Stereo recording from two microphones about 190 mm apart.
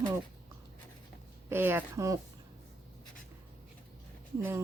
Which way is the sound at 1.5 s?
10° right (ahead or behind).